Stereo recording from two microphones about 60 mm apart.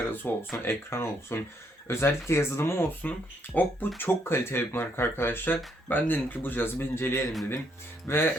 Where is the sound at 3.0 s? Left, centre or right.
Left.